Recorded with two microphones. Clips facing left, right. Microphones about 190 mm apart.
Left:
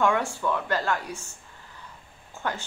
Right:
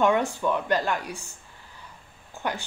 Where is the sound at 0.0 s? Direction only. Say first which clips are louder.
Right 2 dB; 20° right (ahead or behind).